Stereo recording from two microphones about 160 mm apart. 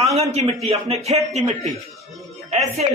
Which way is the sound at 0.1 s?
45° right (ahead or behind).